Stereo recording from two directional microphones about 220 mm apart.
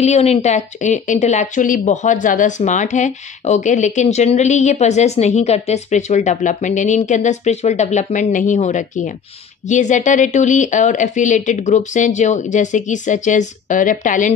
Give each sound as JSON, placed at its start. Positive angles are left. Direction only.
{"t": 0.0, "sound": "a woman's voice", "side_deg": 30}